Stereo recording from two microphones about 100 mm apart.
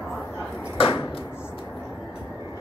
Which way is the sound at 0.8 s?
65° left (ahead or behind).